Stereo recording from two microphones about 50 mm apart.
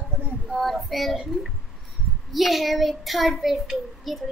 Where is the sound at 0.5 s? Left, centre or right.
Centre.